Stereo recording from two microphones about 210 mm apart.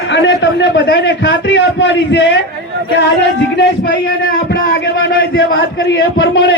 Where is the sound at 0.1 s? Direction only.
55° left (ahead or behind).